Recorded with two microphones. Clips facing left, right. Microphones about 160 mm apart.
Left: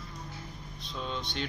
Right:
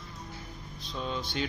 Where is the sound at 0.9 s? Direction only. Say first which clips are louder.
Right 2 dB; 5° right (ahead or behind).